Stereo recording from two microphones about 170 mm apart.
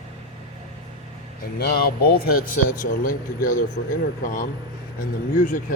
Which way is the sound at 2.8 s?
50° left (ahead or behind).